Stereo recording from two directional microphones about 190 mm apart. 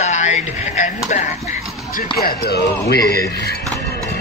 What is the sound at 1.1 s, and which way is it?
Speech, 40° left (ahead or behind).